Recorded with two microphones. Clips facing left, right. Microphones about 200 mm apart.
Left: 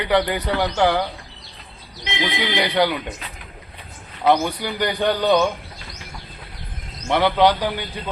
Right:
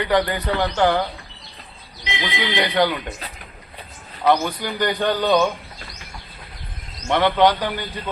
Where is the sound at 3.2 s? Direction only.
35° right (ahead or behind).